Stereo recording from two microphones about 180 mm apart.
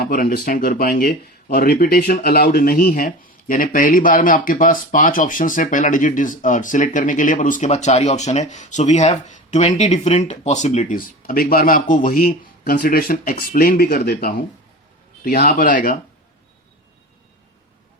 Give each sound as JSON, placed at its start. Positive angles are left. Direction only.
{"t": 0.0, "sound": "speech", "side_deg": 55}